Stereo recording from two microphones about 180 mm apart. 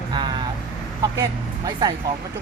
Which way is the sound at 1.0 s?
20° right (ahead or behind).